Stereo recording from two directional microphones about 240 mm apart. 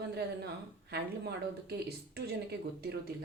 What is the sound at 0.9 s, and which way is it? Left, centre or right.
Speech, right.